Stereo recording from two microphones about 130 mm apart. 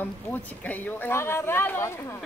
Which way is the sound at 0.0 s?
15° left (ahead or behind).